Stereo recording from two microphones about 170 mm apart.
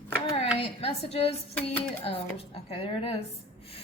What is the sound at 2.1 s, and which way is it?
Speech, 35° left (ahead or behind).